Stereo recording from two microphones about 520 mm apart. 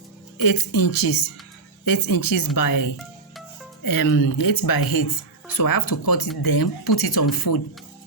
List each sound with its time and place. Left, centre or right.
0.4 s speech: left